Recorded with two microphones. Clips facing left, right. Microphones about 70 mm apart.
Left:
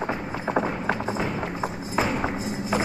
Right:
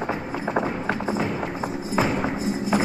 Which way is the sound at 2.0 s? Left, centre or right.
Right.